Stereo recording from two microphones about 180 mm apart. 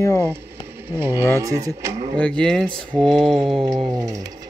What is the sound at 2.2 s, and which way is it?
Mantra, 5° left (ahead or behind).